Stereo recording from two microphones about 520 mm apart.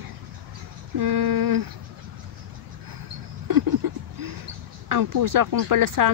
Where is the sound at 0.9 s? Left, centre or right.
Right.